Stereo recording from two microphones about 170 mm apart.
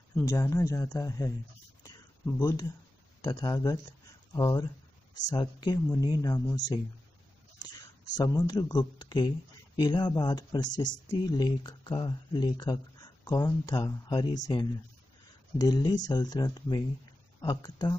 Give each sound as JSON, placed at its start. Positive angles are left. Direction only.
{"t": 0.1, "sound": "speech", "side_deg": 15}
{"t": 1.8, "sound": "a sound", "side_deg": 25}
{"t": 3.2, "sound": "speech", "side_deg": 20}
{"t": 8.2, "sound": "speech", "side_deg": 20}